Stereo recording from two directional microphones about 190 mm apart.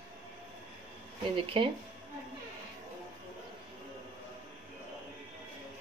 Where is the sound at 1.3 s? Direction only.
25° right (ahead or behind).